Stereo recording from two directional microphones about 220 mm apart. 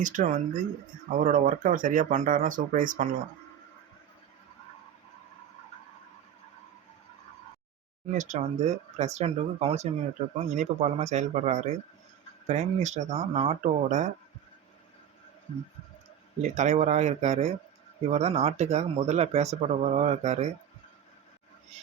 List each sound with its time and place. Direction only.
0.0 s speech: 35° right (ahead or behind)
8.0 s speech: 30° right (ahead or behind)
16.4 s speech: 30° right (ahead or behind)